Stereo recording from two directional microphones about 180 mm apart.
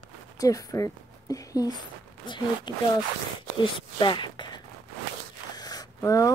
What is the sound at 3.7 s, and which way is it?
Speech, 25° left (ahead or behind).